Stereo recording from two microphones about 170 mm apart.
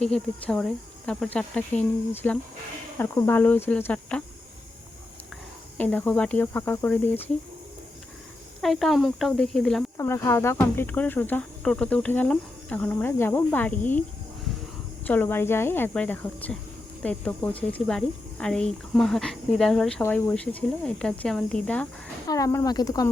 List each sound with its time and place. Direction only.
0.0 s speech: 5° left (ahead or behind)
5.7 s speech: 10° left (ahead or behind)
8.6 s speech: centre (ahead or behind)
10.0 s speech: 15° left (ahead or behind)
15.0 s speech: 10° left (ahead or behind)
22.3 s speech: 20° left (ahead or behind)